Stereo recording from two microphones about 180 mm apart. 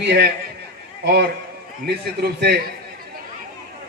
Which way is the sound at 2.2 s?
60° right (ahead or behind).